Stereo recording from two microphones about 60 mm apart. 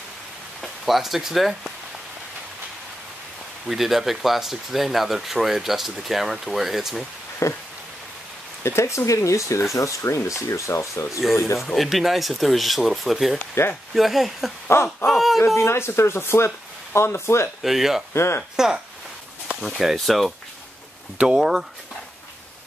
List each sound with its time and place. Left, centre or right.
0.6 s speech: centre
3.6 s speech: centre
7.4 s speech: left
8.6 s speech: left
11.6 s speech: centre
14.7 s speech: left
15.0 s speech: centre
15.5 s speech: left
17.6 s speech: centre
18.1 s speech: left
19.6 s speech: centre